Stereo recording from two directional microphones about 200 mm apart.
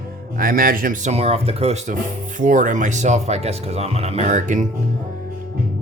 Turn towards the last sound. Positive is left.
turn(degrees=-40)  # may be behind; listen again after turning